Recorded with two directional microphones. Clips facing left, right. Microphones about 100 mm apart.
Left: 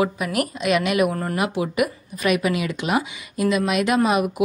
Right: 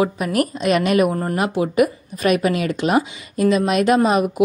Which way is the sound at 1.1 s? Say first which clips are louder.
Right 3 dB; 20° right (ahead or behind).